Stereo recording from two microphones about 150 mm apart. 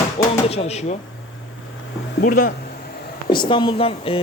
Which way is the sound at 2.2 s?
70° left (ahead or behind).